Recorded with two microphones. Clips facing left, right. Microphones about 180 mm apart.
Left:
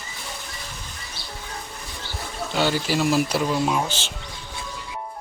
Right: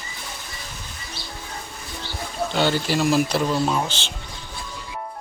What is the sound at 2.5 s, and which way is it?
Speech, 5° left (ahead or behind).